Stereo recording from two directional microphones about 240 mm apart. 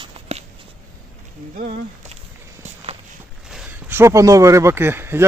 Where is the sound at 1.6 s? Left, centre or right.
Right.